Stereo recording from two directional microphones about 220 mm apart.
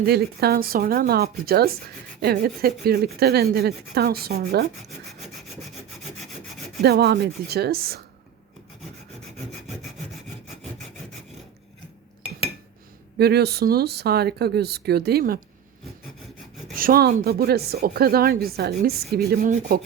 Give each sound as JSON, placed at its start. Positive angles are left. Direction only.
{"t": 0.0, "sound": "speech", "side_deg": -45}
{"t": 6.8, "sound": "speech", "side_deg": -45}
{"t": 13.1, "sound": "speech", "side_deg": -45}
{"t": 16.7, "sound": "speech", "side_deg": -40}